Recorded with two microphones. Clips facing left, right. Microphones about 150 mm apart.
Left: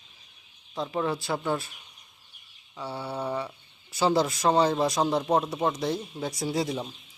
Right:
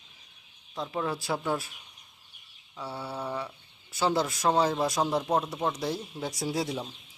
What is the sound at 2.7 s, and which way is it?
Speech, centre (ahead or behind).